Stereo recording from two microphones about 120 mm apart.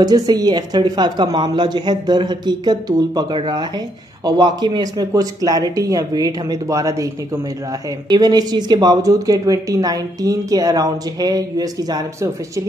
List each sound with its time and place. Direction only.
0.0 s speech: 30° right (ahead or behind)
8.1 s speech: 35° right (ahead or behind)